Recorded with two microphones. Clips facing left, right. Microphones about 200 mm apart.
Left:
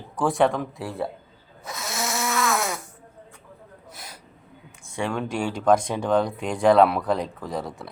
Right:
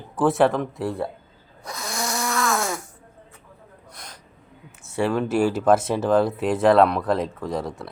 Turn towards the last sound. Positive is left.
turn(degrees=0)  # may be behind; listen again after turning